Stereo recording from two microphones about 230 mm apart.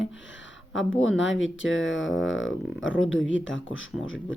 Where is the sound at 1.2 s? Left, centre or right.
Left.